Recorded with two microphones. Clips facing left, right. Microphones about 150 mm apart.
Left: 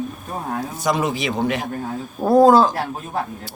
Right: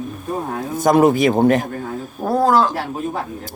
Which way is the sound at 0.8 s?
50° right (ahead or behind).